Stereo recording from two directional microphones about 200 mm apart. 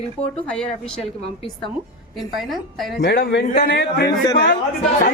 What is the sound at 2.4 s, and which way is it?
Speech, centre (ahead or behind).